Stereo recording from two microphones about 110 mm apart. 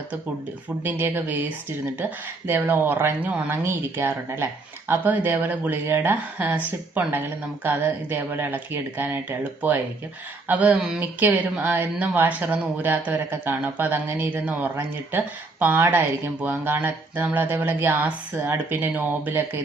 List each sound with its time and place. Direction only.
0.9 s speech: 20° right (ahead or behind)